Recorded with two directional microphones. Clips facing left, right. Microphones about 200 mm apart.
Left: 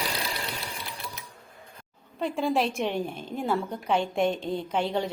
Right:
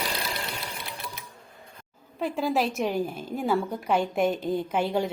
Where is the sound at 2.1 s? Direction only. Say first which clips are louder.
Even; 5° right (ahead or behind).